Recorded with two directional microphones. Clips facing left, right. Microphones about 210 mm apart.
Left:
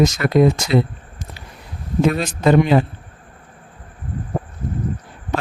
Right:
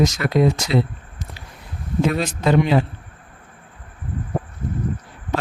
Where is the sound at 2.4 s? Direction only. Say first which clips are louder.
Left 4 dB; 50° left (ahead or behind).